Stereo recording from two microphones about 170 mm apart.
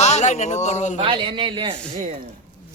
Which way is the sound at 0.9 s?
30° right (ahead or behind).